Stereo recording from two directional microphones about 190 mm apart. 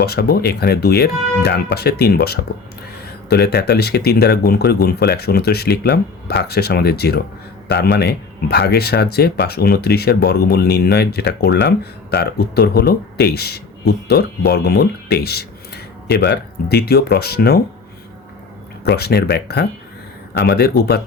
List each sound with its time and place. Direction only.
0.0 s speech: 55° left (ahead or behind)
18.9 s speech: 55° left (ahead or behind)